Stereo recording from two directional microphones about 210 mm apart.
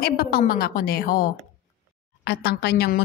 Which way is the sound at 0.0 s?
45° left (ahead or behind).